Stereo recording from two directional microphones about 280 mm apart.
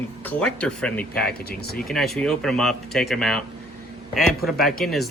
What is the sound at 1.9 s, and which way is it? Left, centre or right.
A man's voice, centre.